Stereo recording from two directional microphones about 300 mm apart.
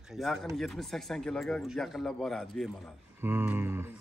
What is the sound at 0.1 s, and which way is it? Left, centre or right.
Speech, centre.